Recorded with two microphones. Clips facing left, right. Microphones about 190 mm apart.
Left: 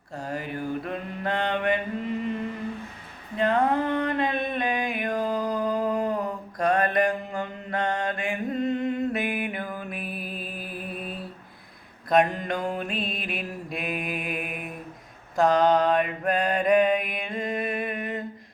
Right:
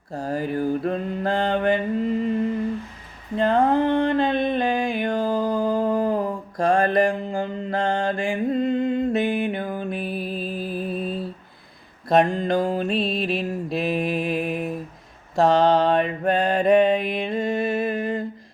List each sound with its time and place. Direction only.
0.1 s mantra: 35° right (ahead or behind)
3.3 s a sound: 30° right (ahead or behind)
12.0 s mantra: 30° right (ahead or behind)